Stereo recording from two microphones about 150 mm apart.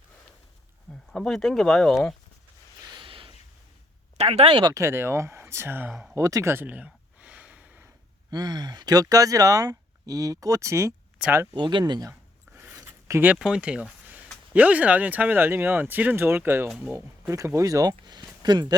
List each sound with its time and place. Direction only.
1.1 s speech: 5° left (ahead or behind)
2.9 s a sound: 35° right (ahead or behind)
4.2 s speech: 40° right (ahead or behind)
4.7 s speech: 20° right (ahead or behind)
5.9 s speech: centre (ahead or behind)
6.1 s a sound: 20° right (ahead or behind)
8.3 s speech: 25° right (ahead or behind)
11.5 s speech: 30° right (ahead or behind)
12.5 s a sound: 20° right (ahead or behind)
13.3 s speech: 5° right (ahead or behind)
16.6 s speech: centre (ahead or behind)
16.9 s speech: 15° right (ahead or behind)